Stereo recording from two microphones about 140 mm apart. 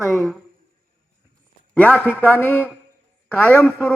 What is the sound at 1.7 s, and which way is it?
A man's voice, 10° left (ahead or behind).